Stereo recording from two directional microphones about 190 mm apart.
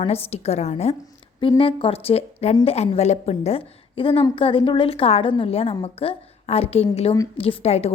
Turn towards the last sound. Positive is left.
turn(degrees=35)  # may be behind; listen again after turning